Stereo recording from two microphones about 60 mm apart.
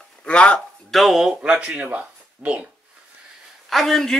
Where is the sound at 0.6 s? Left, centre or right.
Centre.